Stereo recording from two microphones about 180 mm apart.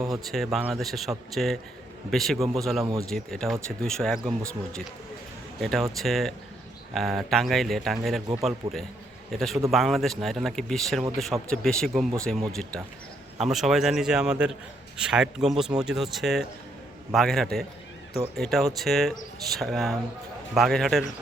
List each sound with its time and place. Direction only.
0.0 s speech: centre (ahead or behind)
5.5 s speech: centre (ahead or behind)
8.6 s a man's voice: 30° right (ahead or behind)
9.3 s speech: centre (ahead or behind)